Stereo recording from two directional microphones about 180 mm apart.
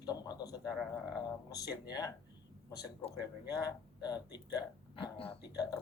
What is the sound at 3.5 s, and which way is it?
A man's voice, 20° left (ahead or behind).